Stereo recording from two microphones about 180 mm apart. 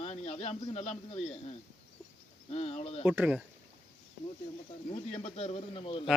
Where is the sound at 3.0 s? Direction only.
10° right (ahead or behind).